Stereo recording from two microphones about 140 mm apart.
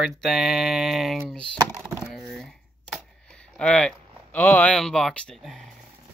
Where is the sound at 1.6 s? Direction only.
20° right (ahead or behind).